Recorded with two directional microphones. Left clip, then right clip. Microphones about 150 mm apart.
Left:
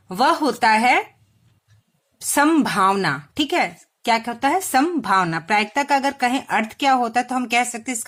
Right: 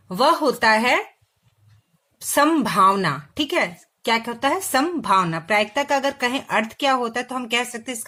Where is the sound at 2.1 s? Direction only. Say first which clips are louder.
Left 1 dB; 25° left (ahead or behind).